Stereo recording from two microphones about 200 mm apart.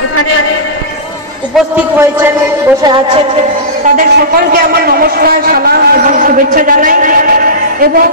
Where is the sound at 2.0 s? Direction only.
15° right (ahead or behind).